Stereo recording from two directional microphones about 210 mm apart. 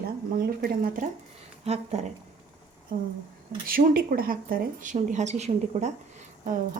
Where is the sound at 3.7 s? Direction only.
45° right (ahead or behind).